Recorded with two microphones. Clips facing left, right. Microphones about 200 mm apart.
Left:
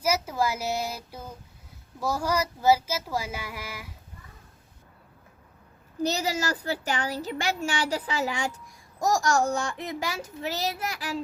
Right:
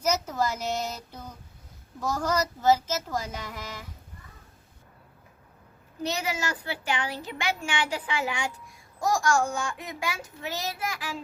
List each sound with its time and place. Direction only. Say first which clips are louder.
0.0 s speech: left 1 dB; 10° left (ahead or behind)
6.0 s a woman's voice: left 3 dB; 40° left (ahead or behind)